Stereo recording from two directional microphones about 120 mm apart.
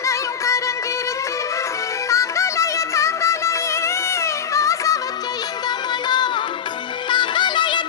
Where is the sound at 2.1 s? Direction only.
25° left (ahead or behind).